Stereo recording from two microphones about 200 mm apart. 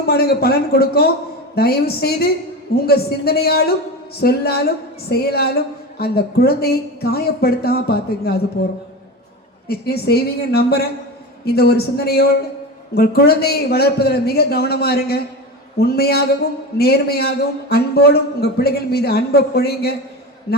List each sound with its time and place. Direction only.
0.0 s a man's voice: 50° left (ahead or behind)
9.6 s a man's voice: 50° left (ahead or behind)